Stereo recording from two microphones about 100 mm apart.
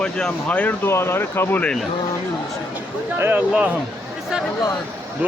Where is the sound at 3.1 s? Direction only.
20° right (ahead or behind).